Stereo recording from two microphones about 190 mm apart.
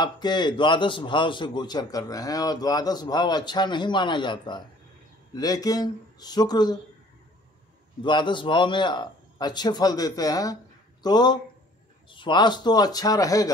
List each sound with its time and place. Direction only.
0.0 s a man's voice: 20° left (ahead or behind)
8.0 s a man's voice: 25° left (ahead or behind)